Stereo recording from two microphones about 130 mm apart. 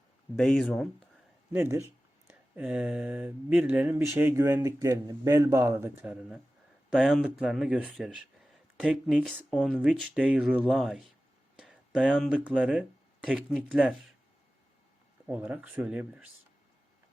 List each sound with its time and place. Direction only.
0.3 s speech: 5° left (ahead or behind)
1.5 s speech: 20° right (ahead or behind)
2.6 s speech: 10° right (ahead or behind)
6.9 s speech: centre (ahead or behind)
11.6 s a sound: 10° right (ahead or behind)
12.3 s speech: 5° right (ahead or behind)
15.3 s speech: 10° right (ahead or behind)